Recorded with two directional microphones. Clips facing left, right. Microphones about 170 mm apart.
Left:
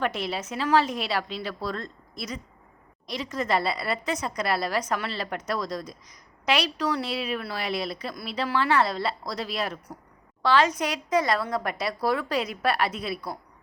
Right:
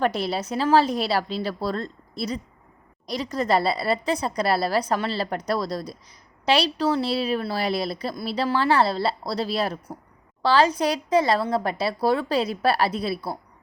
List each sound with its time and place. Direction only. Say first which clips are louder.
0.0 s a woman's voice: right 4 dB; 35° right (ahead or behind)